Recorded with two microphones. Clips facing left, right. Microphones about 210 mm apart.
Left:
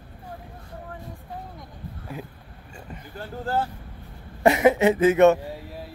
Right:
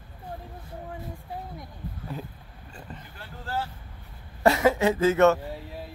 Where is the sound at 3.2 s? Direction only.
45° left (ahead or behind).